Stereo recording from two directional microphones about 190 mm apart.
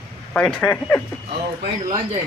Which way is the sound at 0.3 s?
5° left (ahead or behind).